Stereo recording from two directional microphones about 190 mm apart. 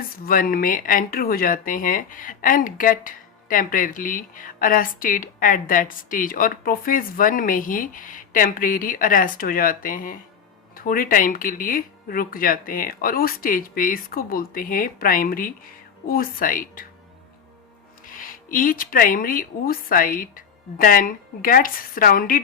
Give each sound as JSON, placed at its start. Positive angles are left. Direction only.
{"t": 0.3, "sound": "speech", "side_deg": 50}
{"t": 18.0, "sound": "speech", "side_deg": 45}